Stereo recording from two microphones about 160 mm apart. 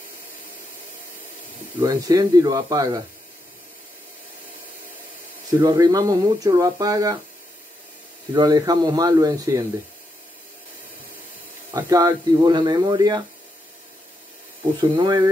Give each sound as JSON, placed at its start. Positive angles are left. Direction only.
{"t": 1.8, "sound": "speech", "side_deg": -20}
{"t": 5.6, "sound": "speech", "side_deg": -25}
{"t": 8.3, "sound": "speech", "side_deg": -25}
{"t": 11.7, "sound": "speech", "side_deg": -25}
{"t": 14.8, "sound": "speech", "side_deg": -30}